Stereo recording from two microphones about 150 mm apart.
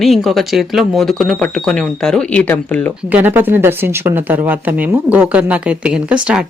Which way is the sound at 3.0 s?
10° right (ahead or behind).